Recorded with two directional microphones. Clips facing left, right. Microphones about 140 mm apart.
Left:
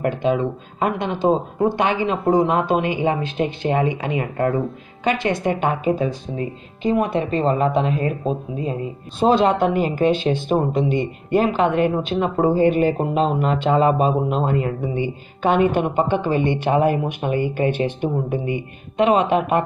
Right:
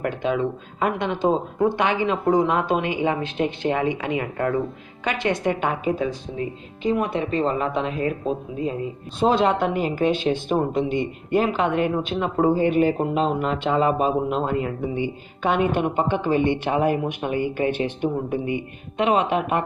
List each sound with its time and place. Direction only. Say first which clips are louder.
0.0 s a woman's voice: left 3 dB; 30° left (ahead or behind)
9.2 s a woman's voice: left 3 dB; 35° left (ahead or behind)
10.5 s speech: left 3 dB; 25° left (ahead or behind)
10.9 s a woman's voice: left 3 dB; 35° left (ahead or behind)